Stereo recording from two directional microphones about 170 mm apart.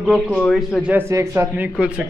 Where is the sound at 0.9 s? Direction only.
15° right (ahead or behind).